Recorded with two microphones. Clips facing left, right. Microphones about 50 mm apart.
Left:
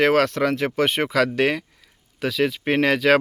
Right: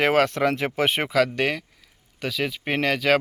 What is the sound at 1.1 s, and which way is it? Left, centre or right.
Speech, centre.